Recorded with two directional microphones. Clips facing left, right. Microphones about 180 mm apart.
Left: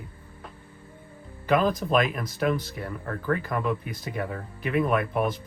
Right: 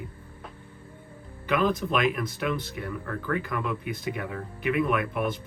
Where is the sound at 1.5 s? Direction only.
40° left (ahead or behind).